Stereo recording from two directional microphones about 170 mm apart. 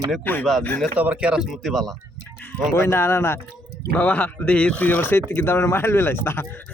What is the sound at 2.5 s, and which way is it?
Speech, 15° left (ahead or behind).